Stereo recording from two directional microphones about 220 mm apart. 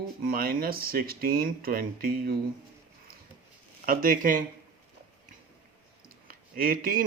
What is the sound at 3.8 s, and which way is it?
Speech, 40° right (ahead or behind).